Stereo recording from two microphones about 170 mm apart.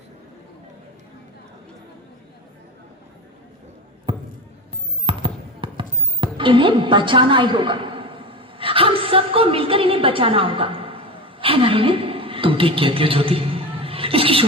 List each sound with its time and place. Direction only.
4.1 s basketball bounce: 30° right (ahead or behind)